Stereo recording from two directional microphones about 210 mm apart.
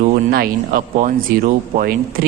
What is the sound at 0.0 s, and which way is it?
A man's voice, 45° right (ahead or behind).